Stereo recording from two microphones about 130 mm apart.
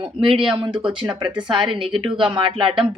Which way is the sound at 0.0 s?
40° right (ahead or behind).